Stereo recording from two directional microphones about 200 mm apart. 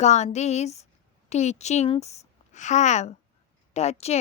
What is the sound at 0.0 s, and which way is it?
A woman's voice, 35° left (ahead or behind).